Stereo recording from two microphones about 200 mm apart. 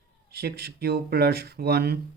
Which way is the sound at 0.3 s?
50° right (ahead or behind).